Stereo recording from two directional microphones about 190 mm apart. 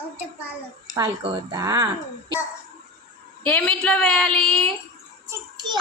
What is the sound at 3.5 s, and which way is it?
A woman's voice, 5° left (ahead or behind).